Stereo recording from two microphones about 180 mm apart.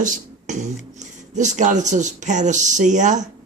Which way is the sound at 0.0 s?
45° right (ahead or behind).